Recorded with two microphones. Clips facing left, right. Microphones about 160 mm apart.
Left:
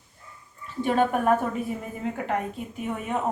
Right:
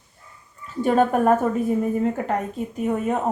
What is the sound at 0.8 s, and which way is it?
Speech, 40° right (ahead or behind).